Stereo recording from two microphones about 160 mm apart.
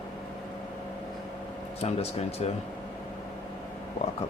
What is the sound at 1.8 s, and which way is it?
Speech, 40° left (ahead or behind).